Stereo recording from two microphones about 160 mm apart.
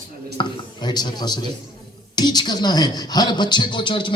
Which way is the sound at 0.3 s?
30° left (ahead or behind).